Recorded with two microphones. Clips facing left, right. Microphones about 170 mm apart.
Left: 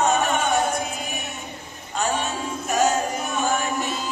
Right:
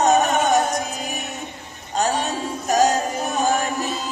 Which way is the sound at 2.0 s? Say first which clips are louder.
Right 3 dB; 40° right (ahead or behind).